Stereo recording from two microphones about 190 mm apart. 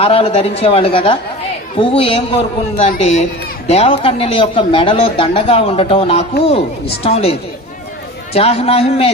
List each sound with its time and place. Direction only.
0.0 s a man's voice: 30° left (ahead or behind)
8.4 s a man's voice: 30° left (ahead or behind)